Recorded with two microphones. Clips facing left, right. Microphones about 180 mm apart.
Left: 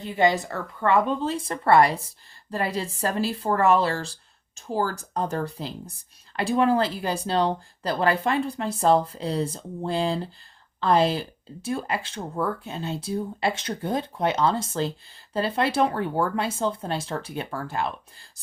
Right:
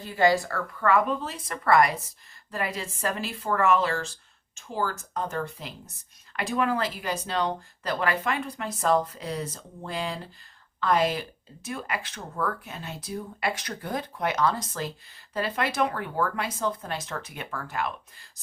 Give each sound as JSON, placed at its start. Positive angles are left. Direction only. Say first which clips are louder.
{"t": 0.0, "sound": "a woman's voice", "louder": "left 1 dB", "side_deg": 20}